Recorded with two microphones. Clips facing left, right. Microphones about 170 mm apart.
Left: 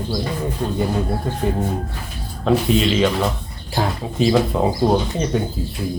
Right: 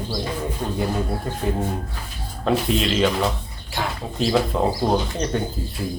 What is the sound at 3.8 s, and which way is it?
Speech, 35° left (ahead or behind).